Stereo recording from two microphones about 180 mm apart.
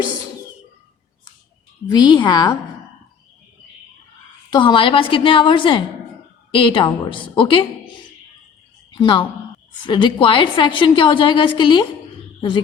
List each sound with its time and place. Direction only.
1.9 s a woman's voice: 25° left (ahead or behind)
4.5 s a woman's voice: 25° left (ahead or behind)
8.9 s a woman's voice: 25° left (ahead or behind)